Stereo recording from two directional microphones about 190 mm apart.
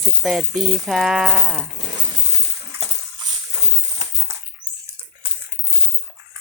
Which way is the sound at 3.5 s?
20° right (ahead or behind).